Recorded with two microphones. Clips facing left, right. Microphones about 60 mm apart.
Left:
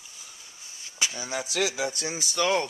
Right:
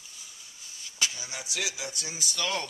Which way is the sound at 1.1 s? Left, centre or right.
Left.